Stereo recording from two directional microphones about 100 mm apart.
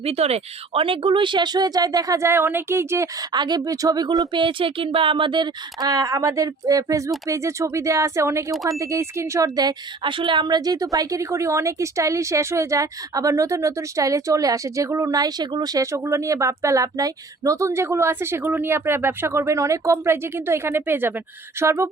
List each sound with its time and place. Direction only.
0.0 s speech: 90° right; by 3.1 s 25° right (ahead or behind)
3.3 s a woman's voice: 45° right (ahead or behind); by 21.8 s 30° right (ahead or behind)